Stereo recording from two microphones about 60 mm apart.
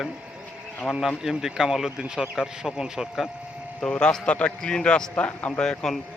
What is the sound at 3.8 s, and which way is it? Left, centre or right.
A man's voice, centre.